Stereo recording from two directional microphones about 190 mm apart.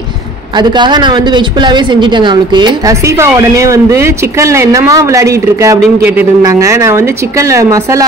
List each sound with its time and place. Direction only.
0.6 s a woman's voice: 25° right (ahead or behind)